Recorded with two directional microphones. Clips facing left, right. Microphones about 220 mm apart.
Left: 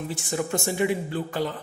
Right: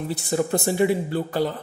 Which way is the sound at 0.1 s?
35° right (ahead or behind).